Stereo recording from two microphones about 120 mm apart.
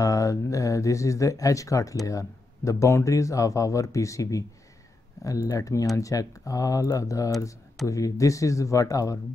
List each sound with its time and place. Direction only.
0.0 s speech: 25° left (ahead or behind)